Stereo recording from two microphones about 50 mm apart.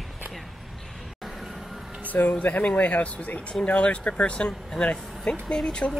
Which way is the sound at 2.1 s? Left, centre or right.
Left.